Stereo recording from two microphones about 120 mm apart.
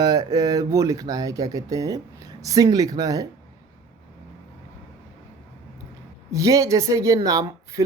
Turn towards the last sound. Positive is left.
turn(degrees=-30)  # may be behind; listen again after turning